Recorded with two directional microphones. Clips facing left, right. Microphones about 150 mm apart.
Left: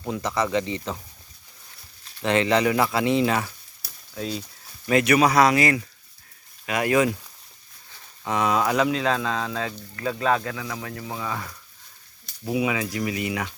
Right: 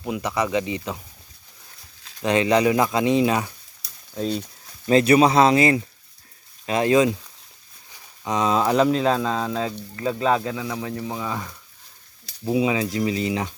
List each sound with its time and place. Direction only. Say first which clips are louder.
0.0 s speech: right 1 dB; 15° right (ahead or behind)
2.2 s speech: right 2 dB; 15° right (ahead or behind)
4.9 s speech: right 3 dB; 30° right (ahead or behind); by 11.4 s 15° right (ahead or behind)
12.5 s speech: right 3 dB; 25° right (ahead or behind)